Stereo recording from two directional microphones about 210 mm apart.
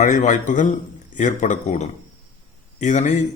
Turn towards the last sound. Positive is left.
turn(degrees=35)  # may be behind; listen again after turning